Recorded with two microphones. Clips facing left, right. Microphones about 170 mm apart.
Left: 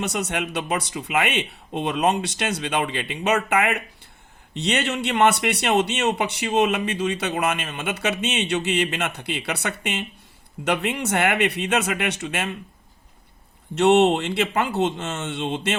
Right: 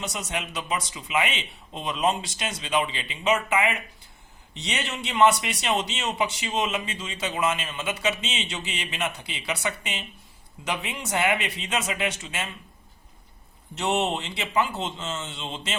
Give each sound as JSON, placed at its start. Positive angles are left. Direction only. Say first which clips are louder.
{"t": 0.0, "sound": "a man's voice", "louder": "left 6 dB", "side_deg": 70}
{"t": 13.7, "sound": "speech", "louder": "left 9 dB", "side_deg": 65}